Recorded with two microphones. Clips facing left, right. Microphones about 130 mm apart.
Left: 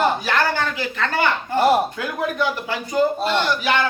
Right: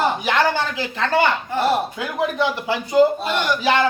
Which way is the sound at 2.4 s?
20° right (ahead or behind).